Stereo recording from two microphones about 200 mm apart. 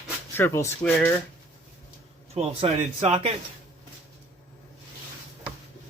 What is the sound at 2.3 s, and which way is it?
Speech, 30° right (ahead or behind).